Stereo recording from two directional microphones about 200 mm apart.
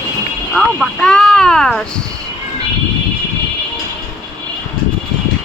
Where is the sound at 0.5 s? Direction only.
Centre (ahead or behind).